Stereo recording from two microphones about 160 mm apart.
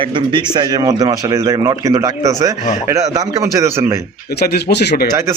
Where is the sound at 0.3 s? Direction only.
25° right (ahead or behind).